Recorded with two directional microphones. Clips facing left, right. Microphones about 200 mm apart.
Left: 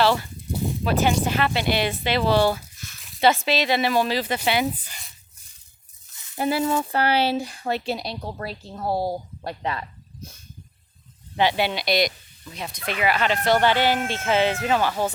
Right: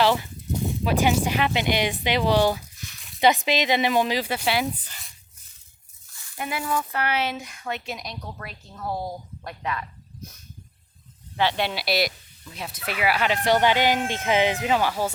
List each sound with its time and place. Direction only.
0.0 s a sound: 15° right (ahead or behind)
0.9 s speech: 10° right (ahead or behind)
4.4 s speech: centre (ahead or behind)
6.1 s stir: 20° left (ahead or behind)
6.3 s speech: 30° left (ahead or behind)
11.5 s speech: centre (ahead or behind)